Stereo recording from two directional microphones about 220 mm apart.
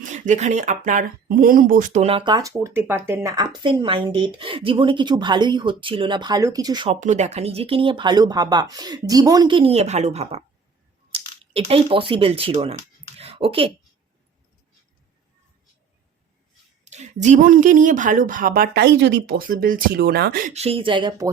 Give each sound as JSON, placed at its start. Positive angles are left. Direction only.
{"t": 0.0, "sound": "speech", "side_deg": -35}
{"t": 7.0, "sound": "speech", "side_deg": -30}
{"t": 13.1, "sound": "a sound", "side_deg": -25}
{"t": 16.8, "sound": "speech", "side_deg": -30}
{"t": 20.5, "sound": "speech", "side_deg": -30}